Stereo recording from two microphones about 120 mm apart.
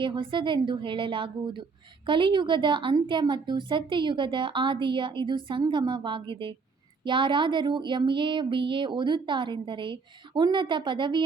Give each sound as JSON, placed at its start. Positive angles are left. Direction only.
{"t": 0.0, "sound": "a woman's voice", "side_deg": -45}